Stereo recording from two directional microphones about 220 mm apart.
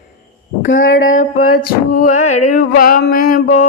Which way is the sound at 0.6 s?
65° left (ahead or behind).